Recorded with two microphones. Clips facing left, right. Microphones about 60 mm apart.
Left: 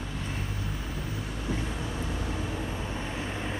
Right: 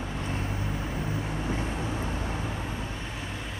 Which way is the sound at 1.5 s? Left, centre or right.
Right.